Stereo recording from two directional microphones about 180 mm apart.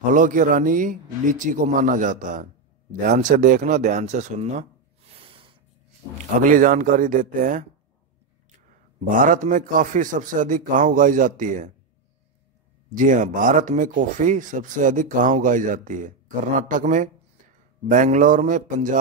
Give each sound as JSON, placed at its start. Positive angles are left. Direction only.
{"t": 0.1, "sound": "speech", "side_deg": -45}
{"t": 5.1, "sound": "snort", "side_deg": -30}
{"t": 6.4, "sound": "speech", "side_deg": -45}
{"t": 9.1, "sound": "speech", "side_deg": -45}
{"t": 12.9, "sound": "speech", "side_deg": -45}